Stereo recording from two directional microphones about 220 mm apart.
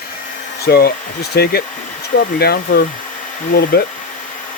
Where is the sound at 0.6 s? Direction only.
45° left (ahead or behind).